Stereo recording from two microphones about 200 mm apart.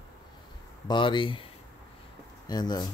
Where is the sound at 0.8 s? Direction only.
25° left (ahead or behind).